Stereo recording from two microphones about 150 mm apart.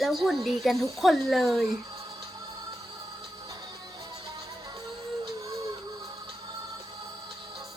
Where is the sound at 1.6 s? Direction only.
20° right (ahead or behind).